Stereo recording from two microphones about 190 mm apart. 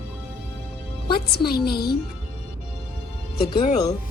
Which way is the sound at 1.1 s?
55° left (ahead or behind).